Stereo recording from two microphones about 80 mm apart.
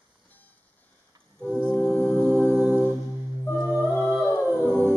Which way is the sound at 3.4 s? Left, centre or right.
Left.